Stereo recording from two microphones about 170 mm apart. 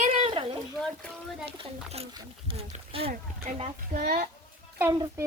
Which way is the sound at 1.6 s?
35° right (ahead or behind).